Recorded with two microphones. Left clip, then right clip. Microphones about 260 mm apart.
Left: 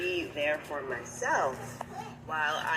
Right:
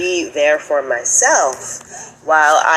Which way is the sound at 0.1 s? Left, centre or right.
Right.